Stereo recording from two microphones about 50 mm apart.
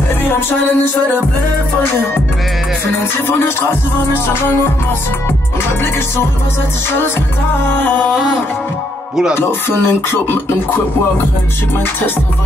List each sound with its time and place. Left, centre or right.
3.3 s music: left
7.7 s music: left
9.3 s music: left